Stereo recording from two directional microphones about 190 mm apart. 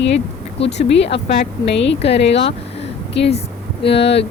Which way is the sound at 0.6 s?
30° left (ahead or behind).